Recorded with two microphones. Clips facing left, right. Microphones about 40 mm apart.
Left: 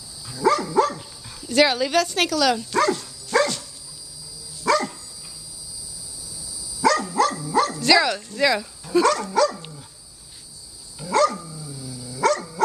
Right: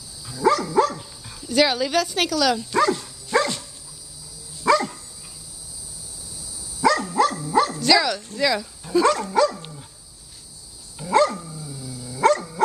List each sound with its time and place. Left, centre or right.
0.3 s dog: centre
3.0 s dog: centre
4.6 s dog: centre
6.2 s cricket: right
6.8 s dog: centre
7.8 s dog: centre
8.4 s speech: centre
9.0 s dog: centre
11.0 s dog: centre